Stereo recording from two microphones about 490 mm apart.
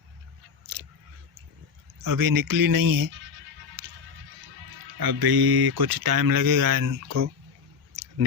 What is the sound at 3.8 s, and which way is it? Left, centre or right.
Music, right.